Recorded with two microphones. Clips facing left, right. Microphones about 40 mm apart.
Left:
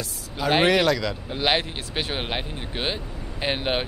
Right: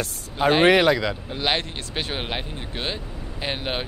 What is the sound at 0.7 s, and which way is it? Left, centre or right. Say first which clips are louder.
Speech: right 3 dB; right.